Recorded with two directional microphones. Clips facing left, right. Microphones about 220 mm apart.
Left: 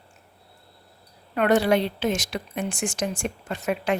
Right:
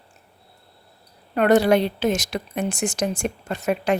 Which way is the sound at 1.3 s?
40° right (ahead or behind).